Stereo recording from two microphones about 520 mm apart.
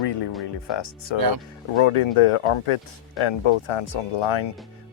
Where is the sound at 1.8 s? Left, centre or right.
Left.